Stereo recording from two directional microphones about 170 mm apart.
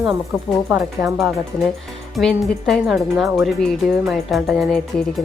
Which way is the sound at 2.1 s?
Centre (ahead or behind).